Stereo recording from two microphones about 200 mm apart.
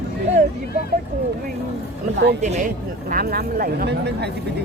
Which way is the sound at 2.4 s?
35° right (ahead or behind).